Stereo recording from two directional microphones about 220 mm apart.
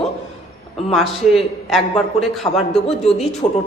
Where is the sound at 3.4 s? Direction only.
25° left (ahead or behind).